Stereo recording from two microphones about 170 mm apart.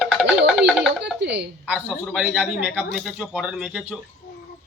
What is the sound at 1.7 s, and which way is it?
Music, 10° right (ahead or behind).